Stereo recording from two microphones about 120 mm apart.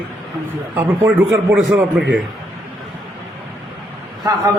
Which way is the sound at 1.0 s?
15° right (ahead or behind).